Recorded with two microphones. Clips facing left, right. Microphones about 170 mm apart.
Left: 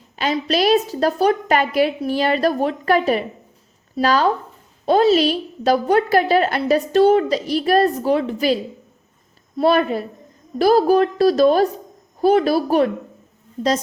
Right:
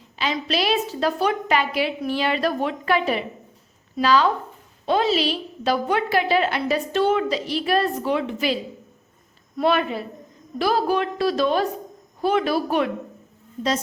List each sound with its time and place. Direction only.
0.2 s a woman's voice: 45° left (ahead or behind)
9.6 s a woman's voice: 35° left (ahead or behind)